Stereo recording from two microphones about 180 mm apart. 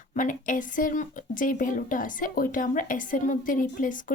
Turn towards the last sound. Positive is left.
turn(degrees=50)  # may be behind; listen again after turning